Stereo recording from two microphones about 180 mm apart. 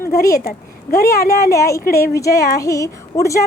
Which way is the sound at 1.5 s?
15° left (ahead or behind).